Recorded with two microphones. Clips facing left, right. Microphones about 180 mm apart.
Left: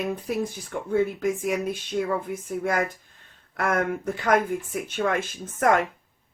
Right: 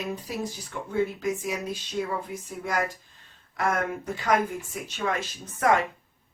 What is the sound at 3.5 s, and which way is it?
Speech, 55° left (ahead or behind).